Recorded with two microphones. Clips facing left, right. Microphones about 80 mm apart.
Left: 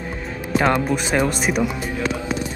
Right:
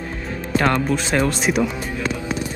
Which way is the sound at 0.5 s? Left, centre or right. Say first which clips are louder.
Even; centre.